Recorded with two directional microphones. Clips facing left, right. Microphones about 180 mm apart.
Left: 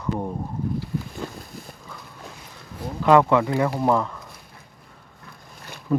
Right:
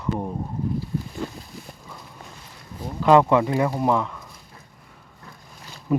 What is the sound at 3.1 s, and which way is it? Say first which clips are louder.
Speech: right 1 dB; 20° right (ahead or behind).